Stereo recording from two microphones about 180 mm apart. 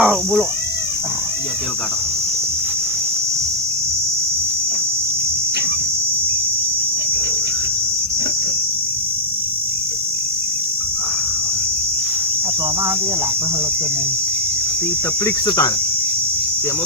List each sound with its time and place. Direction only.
0.0 s speech: 5° right (ahead or behind)
15.4 s cricket: 25° left (ahead or behind)